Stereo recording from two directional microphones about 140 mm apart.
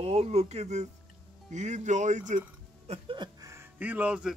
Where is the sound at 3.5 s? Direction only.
15° right (ahead or behind).